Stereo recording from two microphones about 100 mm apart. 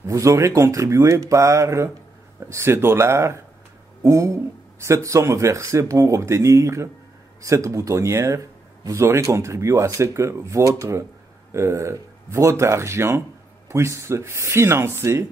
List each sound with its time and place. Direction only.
0.0 s speech: 30° right (ahead or behind)